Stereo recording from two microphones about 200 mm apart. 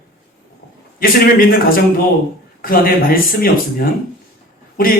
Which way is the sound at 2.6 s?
45° left (ahead or behind).